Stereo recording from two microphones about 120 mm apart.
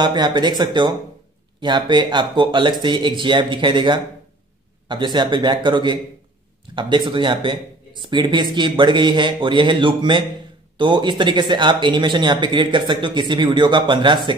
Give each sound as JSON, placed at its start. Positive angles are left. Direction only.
{"t": 0.0, "sound": "speech", "side_deg": -40}